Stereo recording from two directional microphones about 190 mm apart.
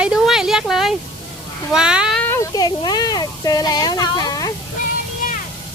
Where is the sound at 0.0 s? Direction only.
5° right (ahead or behind).